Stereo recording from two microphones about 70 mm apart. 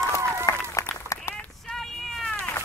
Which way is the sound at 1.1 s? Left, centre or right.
Left.